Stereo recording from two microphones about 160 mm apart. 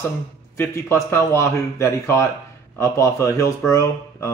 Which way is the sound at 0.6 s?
15° left (ahead or behind).